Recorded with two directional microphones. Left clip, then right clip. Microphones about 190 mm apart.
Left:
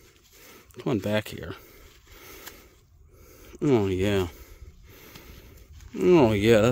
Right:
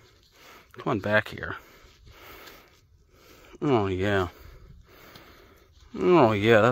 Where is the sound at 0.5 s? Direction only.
40° left (ahead or behind).